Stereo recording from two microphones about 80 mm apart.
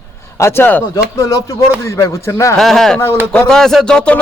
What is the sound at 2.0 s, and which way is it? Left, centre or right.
Speech, left.